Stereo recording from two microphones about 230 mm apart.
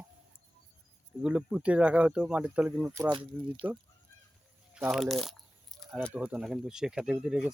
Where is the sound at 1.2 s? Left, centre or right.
Centre.